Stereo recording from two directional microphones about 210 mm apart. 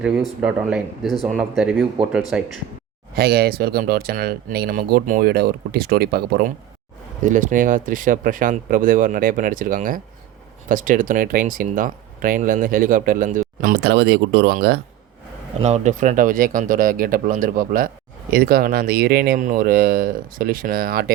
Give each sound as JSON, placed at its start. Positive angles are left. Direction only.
{"t": 0.0, "sound": "speech", "side_deg": 0}
{"t": 3.2, "sound": "speech", "side_deg": -50}
{"t": 7.2, "sound": "speech", "side_deg": -35}
{"t": 15.6, "sound": "speech", "side_deg": -35}